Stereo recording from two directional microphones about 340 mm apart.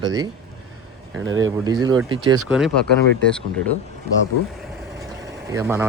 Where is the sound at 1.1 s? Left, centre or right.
Right.